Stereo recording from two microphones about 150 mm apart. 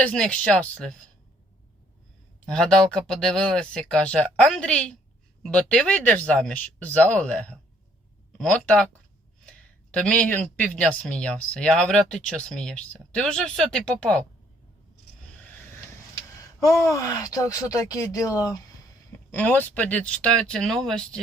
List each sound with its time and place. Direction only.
0.0 s speech: 5° left (ahead or behind)
2.5 s speech: 5° left (ahead or behind)
16.6 s speech: 20° left (ahead or behind)
19.3 s speech: 10° left (ahead or behind)